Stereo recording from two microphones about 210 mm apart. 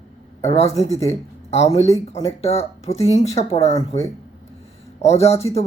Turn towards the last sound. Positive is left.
turn(degrees=30)  # may be behind; listen again after turning